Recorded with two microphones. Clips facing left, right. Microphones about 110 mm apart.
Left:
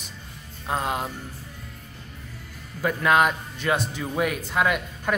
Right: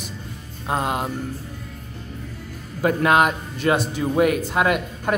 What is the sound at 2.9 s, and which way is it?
Speech, 60° right (ahead or behind).